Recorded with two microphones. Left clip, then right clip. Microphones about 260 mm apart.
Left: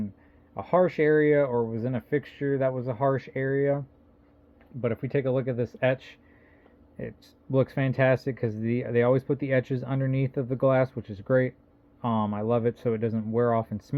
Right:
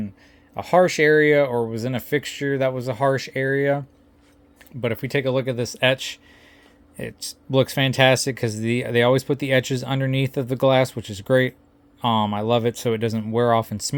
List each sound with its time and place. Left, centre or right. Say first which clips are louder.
0.5 s speech: right 6 dB; right